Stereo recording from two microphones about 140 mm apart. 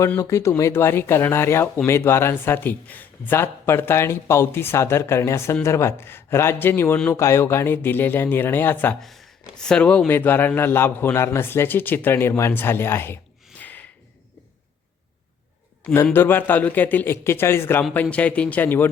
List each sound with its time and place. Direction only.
0.2 s speech: 20° left (ahead or behind)
9.0 s speech: centre (ahead or behind); by 13.1 s 15° left (ahead or behind)
13.6 s a sound: 10° left (ahead or behind)
15.8 s speech: 10° left (ahead or behind)